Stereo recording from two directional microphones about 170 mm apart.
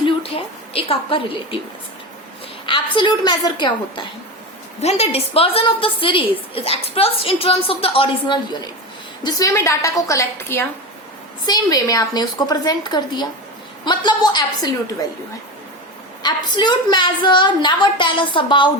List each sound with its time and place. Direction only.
0.0 s a sound: 35° left (ahead or behind)
2.6 s a woman's voice: 30° left (ahead or behind)
4.8 s a woman's voice: 40° left (ahead or behind)
9.2 s a woman's voice: 20° left (ahead or behind)
16.2 s a woman's voice: 25° left (ahead or behind)